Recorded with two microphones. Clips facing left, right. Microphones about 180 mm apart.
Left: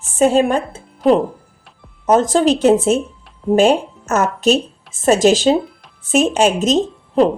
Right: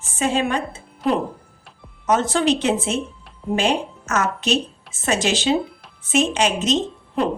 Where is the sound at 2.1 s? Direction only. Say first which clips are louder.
Left 6 dB; 40° left (ahead or behind).